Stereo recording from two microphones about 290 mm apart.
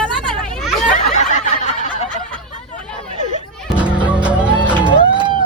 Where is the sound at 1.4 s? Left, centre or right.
Left.